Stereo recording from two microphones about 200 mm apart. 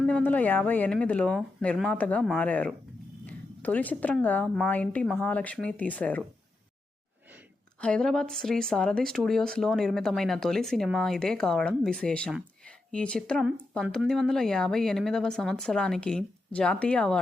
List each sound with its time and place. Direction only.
0.0 s a woman's voice: 5° left (ahead or behind)
7.8 s speech: 5° left (ahead or behind)